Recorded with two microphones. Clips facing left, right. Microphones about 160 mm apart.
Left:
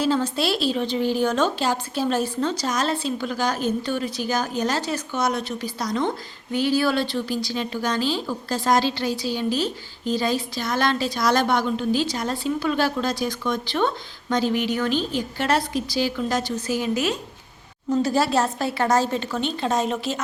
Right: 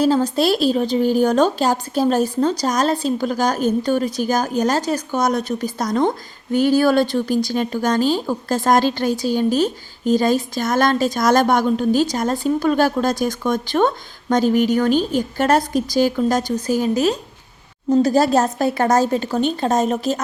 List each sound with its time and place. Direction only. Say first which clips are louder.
0.0 s a woman's voice: right 6 dB; 40° right (ahead or behind)